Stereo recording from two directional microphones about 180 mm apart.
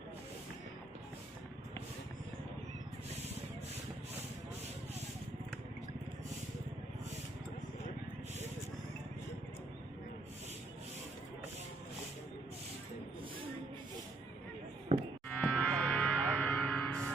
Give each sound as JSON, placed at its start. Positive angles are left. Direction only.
{"t": 14.9, "sound": "music", "side_deg": -30}
{"t": 15.4, "sound": "music", "side_deg": 5}